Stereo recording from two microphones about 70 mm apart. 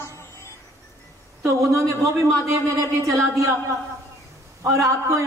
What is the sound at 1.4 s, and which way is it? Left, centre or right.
Speech, right.